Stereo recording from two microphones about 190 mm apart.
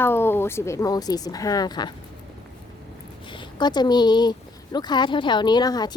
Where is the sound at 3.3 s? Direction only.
20° left (ahead or behind).